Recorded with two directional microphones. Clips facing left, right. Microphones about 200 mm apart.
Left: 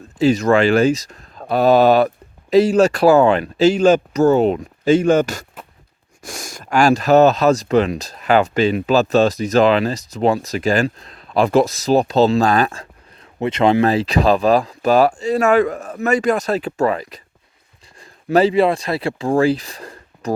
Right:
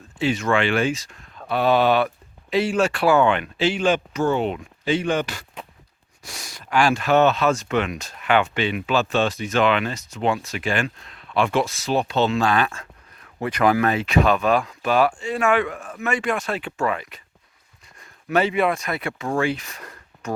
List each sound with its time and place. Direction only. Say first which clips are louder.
0.2 s speech: left 7 dB; 40° left (ahead or behind)
13.4 s speech: left 5 dB; 25° left (ahead or behind)